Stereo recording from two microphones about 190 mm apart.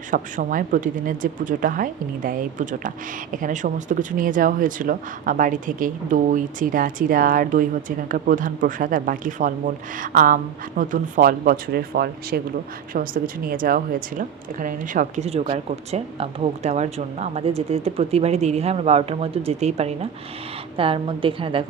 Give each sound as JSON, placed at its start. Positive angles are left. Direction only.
{"t": 0.1, "sound": "a woman's voice", "side_deg": -45}